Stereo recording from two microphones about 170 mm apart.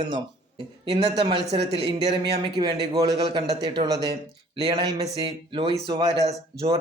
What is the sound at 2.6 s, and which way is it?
A man's voice, 20° right (ahead or behind).